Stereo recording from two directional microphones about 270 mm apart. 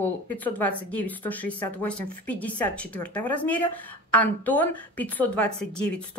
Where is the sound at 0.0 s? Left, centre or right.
Centre.